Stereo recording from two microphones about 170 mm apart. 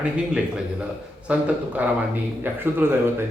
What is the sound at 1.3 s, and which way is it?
Speech, 5° right (ahead or behind).